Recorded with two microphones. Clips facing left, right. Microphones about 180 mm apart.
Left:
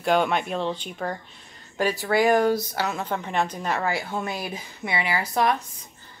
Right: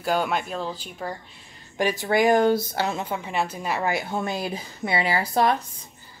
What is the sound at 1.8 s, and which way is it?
A woman's voice, 20° right (ahead or behind).